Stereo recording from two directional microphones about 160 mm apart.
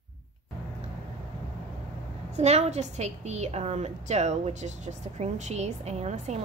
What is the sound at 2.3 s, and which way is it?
A woman's voice, 45° right (ahead or behind).